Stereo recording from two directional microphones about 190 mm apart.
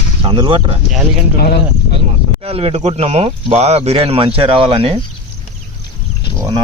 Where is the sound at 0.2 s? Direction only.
25° right (ahead or behind).